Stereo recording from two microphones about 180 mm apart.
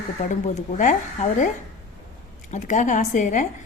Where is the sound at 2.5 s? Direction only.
45° left (ahead or behind).